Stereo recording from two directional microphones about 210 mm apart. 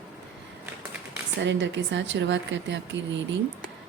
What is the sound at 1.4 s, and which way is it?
A woman's voice, 60° right (ahead or behind).